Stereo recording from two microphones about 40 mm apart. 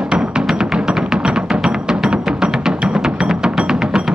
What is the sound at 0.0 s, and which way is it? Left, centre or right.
Music, right.